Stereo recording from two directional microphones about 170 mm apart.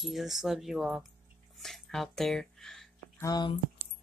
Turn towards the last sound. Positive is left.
turn(degrees=20)  # may be behind; listen again after turning